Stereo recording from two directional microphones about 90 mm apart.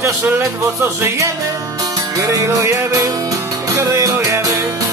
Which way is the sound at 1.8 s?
35° right (ahead or behind).